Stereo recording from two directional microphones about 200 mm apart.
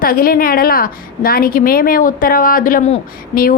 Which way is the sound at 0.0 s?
45° left (ahead or behind).